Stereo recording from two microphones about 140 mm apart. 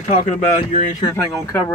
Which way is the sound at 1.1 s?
20° left (ahead or behind).